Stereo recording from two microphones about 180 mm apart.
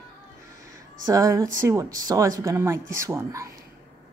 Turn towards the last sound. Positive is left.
turn(degrees=-15)  # may be behind; listen again after turning